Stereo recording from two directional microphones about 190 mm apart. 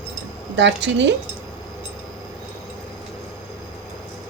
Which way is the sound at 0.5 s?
70° right (ahead or behind).